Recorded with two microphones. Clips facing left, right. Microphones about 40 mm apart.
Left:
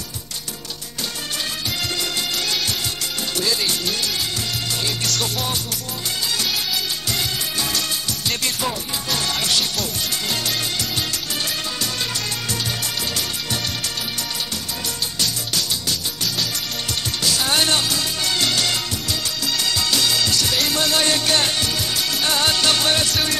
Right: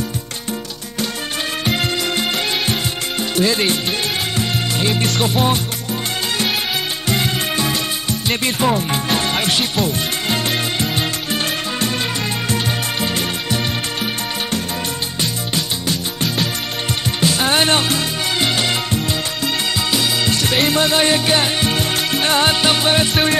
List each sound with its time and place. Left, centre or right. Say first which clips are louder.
1.7 s music: right 8 dB; right
3.3 s speech: right 6 dB; right
4.4 s music: right 5 dB; right
7.1 s music: right 6 dB; right
15.5 s music: right 3 dB; right
19.9 s music: right 2 dB; right